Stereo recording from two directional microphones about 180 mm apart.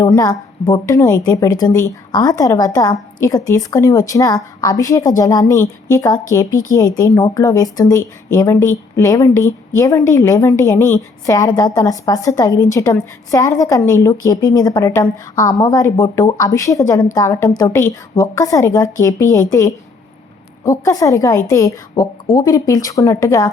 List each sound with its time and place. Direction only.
0.0 s a woman's voice: 20° left (ahead or behind)